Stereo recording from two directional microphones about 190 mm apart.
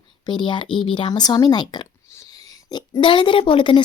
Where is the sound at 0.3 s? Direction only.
25° left (ahead or behind).